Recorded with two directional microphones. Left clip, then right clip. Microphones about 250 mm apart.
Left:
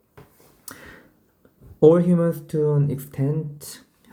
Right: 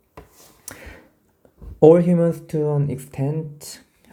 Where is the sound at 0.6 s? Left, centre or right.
Centre.